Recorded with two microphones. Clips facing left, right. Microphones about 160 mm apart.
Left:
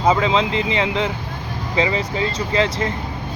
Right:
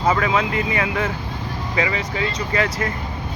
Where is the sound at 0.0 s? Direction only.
20° left (ahead or behind).